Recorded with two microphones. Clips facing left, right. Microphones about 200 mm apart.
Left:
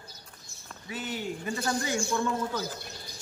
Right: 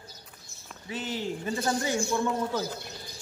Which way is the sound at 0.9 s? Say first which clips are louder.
Right 2 dB; 25° right (ahead or behind).